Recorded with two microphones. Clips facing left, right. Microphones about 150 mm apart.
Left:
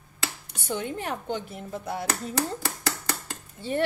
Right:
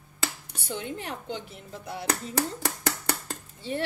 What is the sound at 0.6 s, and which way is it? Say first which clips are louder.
Speech: left 4 dB; 50° left (ahead or behind).